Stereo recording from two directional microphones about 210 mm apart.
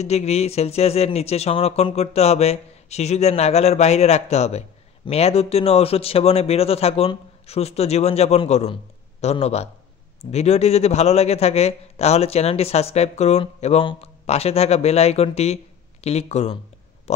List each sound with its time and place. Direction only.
0.0 s a man's voice: 30° left (ahead or behind)